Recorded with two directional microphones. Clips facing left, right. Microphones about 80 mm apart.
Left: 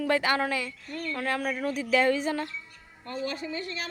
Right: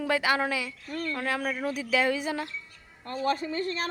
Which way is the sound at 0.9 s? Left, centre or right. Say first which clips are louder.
Right 2 dB; right.